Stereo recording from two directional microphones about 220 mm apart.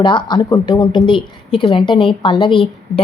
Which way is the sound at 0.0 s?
20° left (ahead or behind).